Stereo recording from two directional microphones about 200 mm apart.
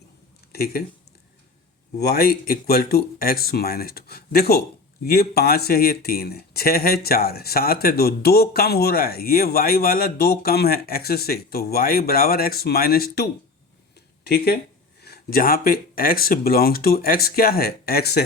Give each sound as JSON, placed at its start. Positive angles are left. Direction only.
{"t": 0.5, "sound": "speech", "side_deg": 50}
{"t": 2.0, "sound": "speech", "side_deg": 50}
{"t": 15.0, "sound": "speech", "side_deg": 50}